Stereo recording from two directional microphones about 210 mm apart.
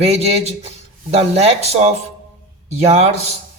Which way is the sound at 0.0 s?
30° right (ahead or behind).